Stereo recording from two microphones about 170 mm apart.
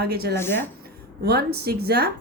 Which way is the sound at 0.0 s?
70° right (ahead or behind).